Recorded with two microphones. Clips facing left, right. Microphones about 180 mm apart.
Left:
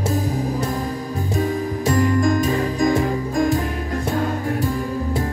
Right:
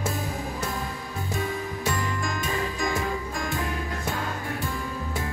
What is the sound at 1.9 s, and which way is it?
Music, 40° left (ahead or behind).